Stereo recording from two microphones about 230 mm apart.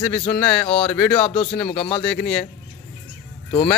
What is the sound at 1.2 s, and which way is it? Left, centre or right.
Speech, left.